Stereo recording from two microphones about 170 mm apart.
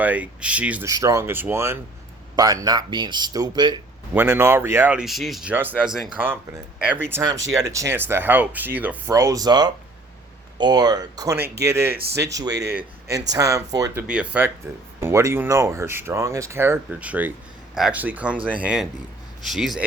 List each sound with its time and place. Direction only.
0.0 s speech: 10° right (ahead or behind)
0.9 s speech: 20° right (ahead or behind)
4.1 s speech: 15° right (ahead or behind)
11.3 s speech: 70° right (ahead or behind)
11.6 s speech: 15° right (ahead or behind)
11.9 s speech: 65° right (ahead or behind)
12.3 s speech: 20° right (ahead or behind)
14.1 s speech: 5° right (ahead or behind)